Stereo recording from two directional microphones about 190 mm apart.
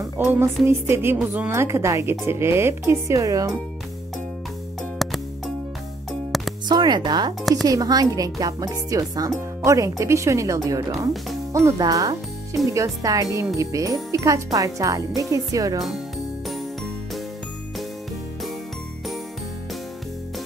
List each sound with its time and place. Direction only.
0.2 s speech: 15° right (ahead or behind)
5.0 s music: centre (ahead or behind)
6.3 s music: centre (ahead or behind)
6.7 s speech: 25° right (ahead or behind)